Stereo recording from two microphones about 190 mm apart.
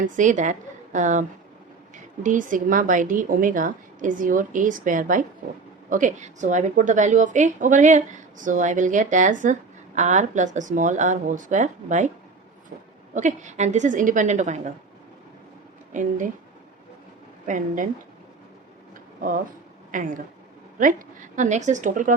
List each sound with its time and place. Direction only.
0.0 s a woman's voice: 40° right (ahead or behind)
2.2 s a woman's voice: 45° right (ahead or behind)
13.1 s a woman's voice: 40° right (ahead or behind)
15.9 s a woman's voice: 40° right (ahead or behind)
17.4 s a woman's voice: 45° right (ahead or behind)
19.9 s a woman's voice: 45° right (ahead or behind)